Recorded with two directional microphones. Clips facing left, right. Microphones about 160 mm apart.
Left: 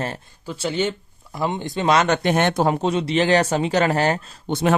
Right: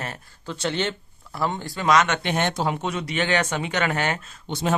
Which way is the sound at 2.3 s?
55° left (ahead or behind).